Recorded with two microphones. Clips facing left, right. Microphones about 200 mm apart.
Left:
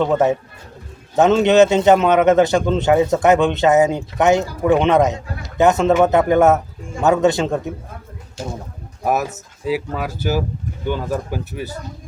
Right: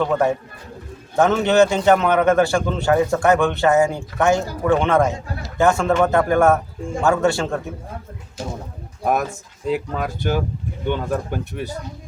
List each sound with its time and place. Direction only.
0.0 s a man's voice: 20° left (ahead or behind)
9.0 s speech: 5° left (ahead or behind)